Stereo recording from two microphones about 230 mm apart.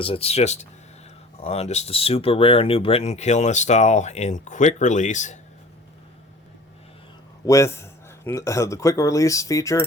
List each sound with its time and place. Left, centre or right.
0.0 s speech: left
7.4 s speech: centre